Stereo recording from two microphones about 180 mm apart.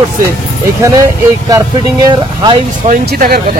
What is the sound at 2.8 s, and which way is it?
Speech, 55° right (ahead or behind).